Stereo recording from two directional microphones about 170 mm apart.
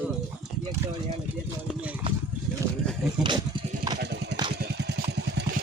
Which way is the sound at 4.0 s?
90° right.